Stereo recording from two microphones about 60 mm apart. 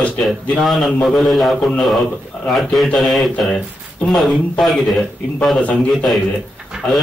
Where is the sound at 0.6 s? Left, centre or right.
Centre.